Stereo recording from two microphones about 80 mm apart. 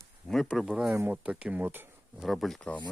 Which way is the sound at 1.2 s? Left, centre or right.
Centre.